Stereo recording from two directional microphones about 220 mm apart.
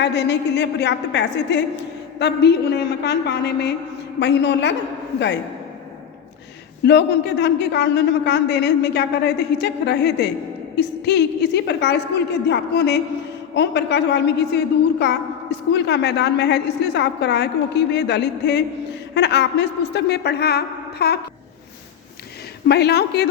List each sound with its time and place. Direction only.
0.0 s a woman's voice: 50° left (ahead or behind)
6.8 s a woman's voice: 50° left (ahead or behind)
22.6 s a woman's voice: 45° left (ahead or behind)